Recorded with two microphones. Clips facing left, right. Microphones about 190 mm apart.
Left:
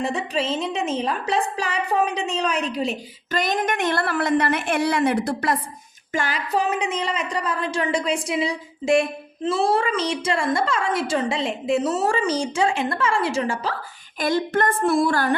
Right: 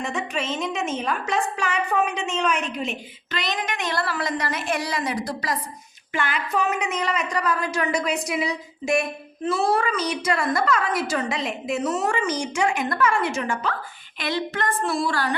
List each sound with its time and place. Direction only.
0.0 s a woman's voice: 35° left (ahead or behind); by 5.5 s 60° left (ahead or behind)
6.1 s a woman's voice: 40° left (ahead or behind)
14.2 s a sound: 45° left (ahead or behind)